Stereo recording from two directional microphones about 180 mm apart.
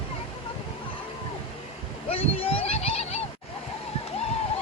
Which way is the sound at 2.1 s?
30° left (ahead or behind).